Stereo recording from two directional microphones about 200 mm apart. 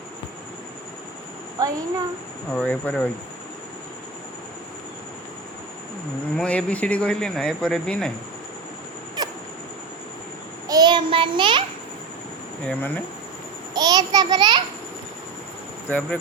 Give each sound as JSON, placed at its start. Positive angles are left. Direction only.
{"t": 1.5, "sound": "a woman's voice", "side_deg": -15}
{"t": 2.5, "sound": "speech", "side_deg": 5}
{"t": 6.3, "sound": "speech", "side_deg": 5}
{"t": 10.7, "sound": "child singing", "side_deg": -20}
{"t": 12.6, "sound": "speech", "side_deg": 10}
{"t": 13.7, "sound": "a child's voice", "side_deg": -20}
{"t": 15.9, "sound": "speech", "side_deg": 10}